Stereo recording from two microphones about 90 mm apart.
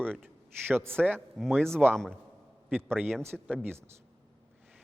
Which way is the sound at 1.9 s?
5° left (ahead or behind).